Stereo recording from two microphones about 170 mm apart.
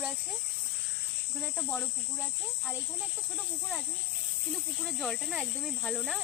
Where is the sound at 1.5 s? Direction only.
10° left (ahead or behind).